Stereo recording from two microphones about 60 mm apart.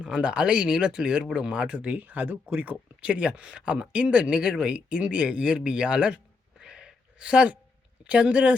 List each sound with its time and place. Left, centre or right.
0.0 s speech: centre; by 2.7 s right
3.0 s speech: centre
6.6 s a sound: centre
8.0 s speech: centre